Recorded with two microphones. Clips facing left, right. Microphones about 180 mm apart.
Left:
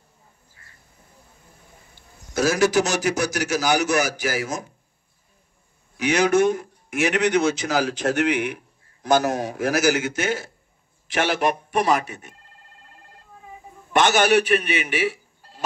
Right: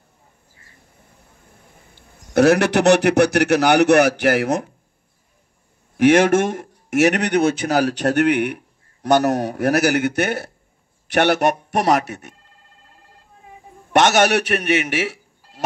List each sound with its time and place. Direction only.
2.3 s a man's voice: 65° right (ahead or behind)
5.9 s a man's voice: 50° right (ahead or behind)
7.2 s a man's voice: 60° right (ahead or behind)
13.9 s a man's voice: 70° right (ahead or behind)